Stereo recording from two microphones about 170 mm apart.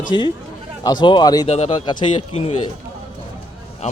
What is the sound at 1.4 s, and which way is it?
Speech, 35° left (ahead or behind).